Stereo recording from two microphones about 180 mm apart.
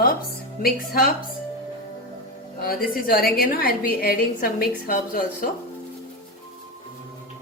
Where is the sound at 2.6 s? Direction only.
55° left (ahead or behind).